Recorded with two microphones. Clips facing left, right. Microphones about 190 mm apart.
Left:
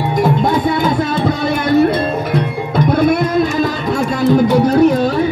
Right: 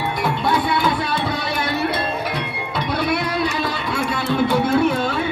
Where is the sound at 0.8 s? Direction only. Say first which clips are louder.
Left 6 dB; 50° left (ahead or behind).